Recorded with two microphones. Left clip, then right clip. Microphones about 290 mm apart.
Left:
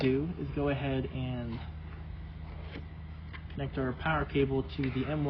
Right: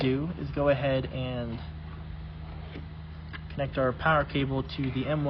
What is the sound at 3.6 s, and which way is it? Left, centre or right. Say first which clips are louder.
Speech: right 8 dB; right.